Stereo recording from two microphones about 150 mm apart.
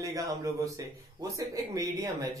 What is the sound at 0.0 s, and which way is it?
A man's voice, 20° right (ahead or behind).